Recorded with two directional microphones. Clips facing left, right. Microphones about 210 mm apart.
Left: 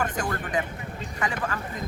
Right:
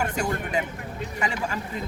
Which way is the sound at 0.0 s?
10° right (ahead or behind).